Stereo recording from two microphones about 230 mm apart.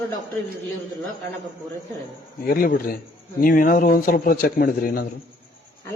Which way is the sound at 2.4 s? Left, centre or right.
Left.